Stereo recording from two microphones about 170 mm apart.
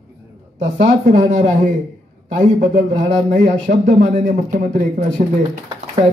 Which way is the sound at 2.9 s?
45° right (ahead or behind).